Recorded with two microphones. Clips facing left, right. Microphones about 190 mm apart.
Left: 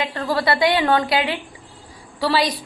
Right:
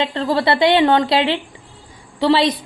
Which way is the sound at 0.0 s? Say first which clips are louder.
Right 4 dB; 25° right (ahead or behind).